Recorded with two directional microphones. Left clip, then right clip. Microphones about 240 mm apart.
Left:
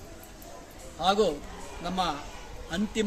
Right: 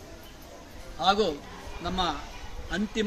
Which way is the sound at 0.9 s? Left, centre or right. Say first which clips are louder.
Even; left.